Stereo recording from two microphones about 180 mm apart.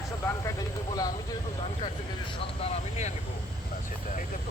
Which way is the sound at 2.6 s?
35° left (ahead or behind).